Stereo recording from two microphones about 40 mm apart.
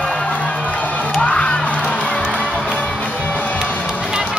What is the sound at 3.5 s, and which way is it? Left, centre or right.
Music, right.